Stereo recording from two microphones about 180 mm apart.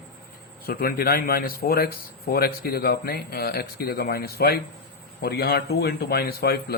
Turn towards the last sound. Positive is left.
turn(degrees=55)  # may be behind; listen again after turning